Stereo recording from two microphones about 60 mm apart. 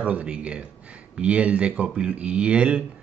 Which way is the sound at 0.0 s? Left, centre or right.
Right.